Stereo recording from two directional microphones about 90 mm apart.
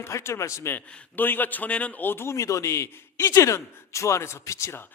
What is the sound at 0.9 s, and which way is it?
A man's voice, 15° left (ahead or behind).